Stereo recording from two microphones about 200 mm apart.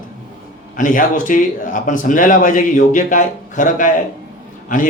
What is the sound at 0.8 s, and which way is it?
Speech, 40° left (ahead or behind).